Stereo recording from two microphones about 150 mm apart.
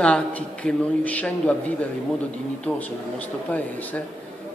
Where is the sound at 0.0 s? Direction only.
10° left (ahead or behind).